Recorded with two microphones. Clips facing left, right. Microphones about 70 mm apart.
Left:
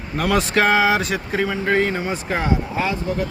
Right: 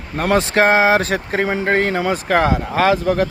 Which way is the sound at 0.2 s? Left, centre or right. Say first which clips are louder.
Right 3 dB; right.